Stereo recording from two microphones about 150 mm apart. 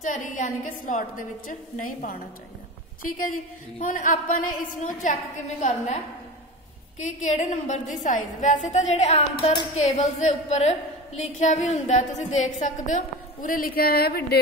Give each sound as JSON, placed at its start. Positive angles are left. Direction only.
{"t": 0.0, "sound": "a woman's voice", "side_deg": 60}
{"t": 7.0, "sound": "a woman's voice", "side_deg": 55}